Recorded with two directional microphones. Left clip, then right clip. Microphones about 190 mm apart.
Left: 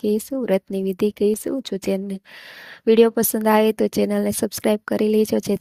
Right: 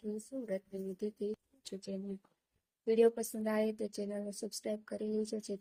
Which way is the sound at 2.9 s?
55° left (ahead or behind).